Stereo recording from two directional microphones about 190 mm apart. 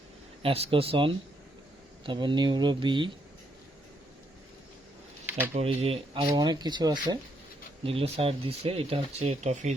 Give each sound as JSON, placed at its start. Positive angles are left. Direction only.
{"t": 0.4, "sound": "speech", "side_deg": -30}
{"t": 5.5, "sound": "speech", "side_deg": -30}
{"t": 7.9, "sound": "speech", "side_deg": -30}